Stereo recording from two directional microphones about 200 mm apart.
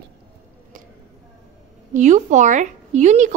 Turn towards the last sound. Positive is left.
turn(degrees=-35)  # may be behind; listen again after turning